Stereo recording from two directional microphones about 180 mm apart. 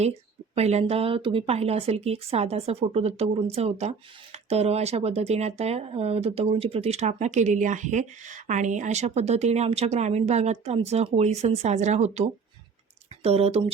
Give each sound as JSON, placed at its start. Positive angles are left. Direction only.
{"t": 0.0, "sound": "speech", "side_deg": -35}